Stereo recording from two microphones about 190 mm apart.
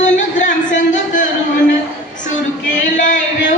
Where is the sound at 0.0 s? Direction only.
40° left (ahead or behind).